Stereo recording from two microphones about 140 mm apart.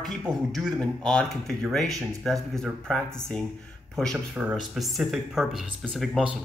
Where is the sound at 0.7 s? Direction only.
5° left (ahead or behind).